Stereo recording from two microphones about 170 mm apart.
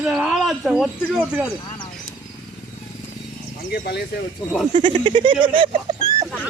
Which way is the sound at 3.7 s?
70° left (ahead or behind).